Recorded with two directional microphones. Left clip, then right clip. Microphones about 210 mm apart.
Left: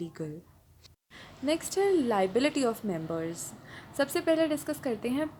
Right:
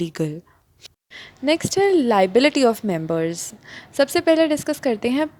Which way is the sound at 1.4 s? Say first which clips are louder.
Right 9 dB; 40° right (ahead or behind).